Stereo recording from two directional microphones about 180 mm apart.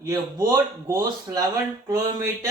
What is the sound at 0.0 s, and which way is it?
Speech, 15° right (ahead or behind).